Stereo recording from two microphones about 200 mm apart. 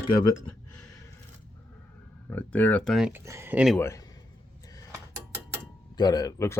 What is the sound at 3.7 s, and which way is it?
Speech, 10° left (ahead or behind).